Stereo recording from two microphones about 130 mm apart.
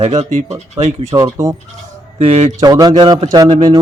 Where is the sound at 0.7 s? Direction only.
60° right (ahead or behind).